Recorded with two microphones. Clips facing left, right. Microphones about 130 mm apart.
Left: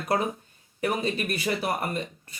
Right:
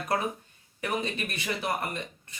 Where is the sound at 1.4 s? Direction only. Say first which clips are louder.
Left 1 dB; 30° left (ahead or behind).